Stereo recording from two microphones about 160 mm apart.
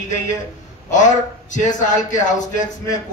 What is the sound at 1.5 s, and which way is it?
Speech, 50° left (ahead or behind).